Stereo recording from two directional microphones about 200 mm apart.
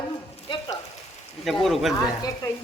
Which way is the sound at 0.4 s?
25° left (ahead or behind).